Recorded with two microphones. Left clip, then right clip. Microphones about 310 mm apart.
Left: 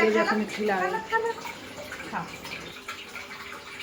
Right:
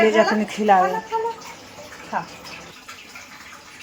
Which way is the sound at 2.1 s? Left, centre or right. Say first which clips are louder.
Right 8 dB; right.